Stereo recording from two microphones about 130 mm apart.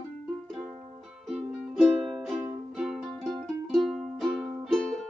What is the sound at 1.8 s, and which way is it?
Music, centre (ahead or behind).